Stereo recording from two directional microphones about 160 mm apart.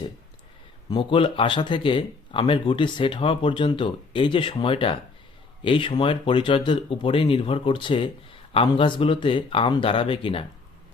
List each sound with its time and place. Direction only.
0.9 s speech: 30° left (ahead or behind)